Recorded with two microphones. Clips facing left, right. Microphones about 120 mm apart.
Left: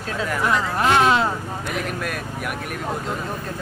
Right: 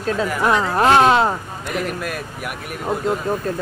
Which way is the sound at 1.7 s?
Centre (ahead or behind).